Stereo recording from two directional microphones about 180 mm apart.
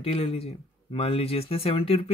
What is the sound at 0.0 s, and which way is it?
Speech, 30° left (ahead or behind).